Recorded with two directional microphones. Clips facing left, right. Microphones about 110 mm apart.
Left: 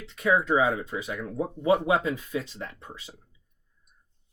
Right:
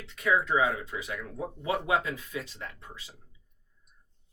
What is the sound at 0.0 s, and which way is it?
Speech, 20° left (ahead or behind).